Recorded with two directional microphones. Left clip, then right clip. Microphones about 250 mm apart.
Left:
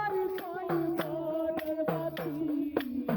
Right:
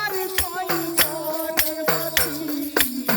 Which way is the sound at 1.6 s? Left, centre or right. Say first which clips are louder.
Right 8 dB; right.